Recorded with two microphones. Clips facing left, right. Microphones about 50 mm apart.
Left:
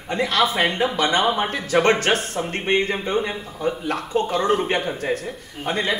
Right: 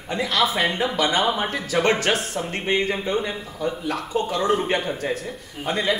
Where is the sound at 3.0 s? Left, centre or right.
Centre.